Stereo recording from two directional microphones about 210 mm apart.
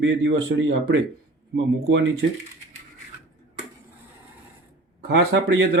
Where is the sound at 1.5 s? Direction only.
60° right (ahead or behind).